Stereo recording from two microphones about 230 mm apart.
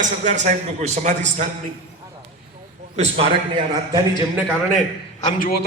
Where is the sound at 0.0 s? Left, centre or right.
Right.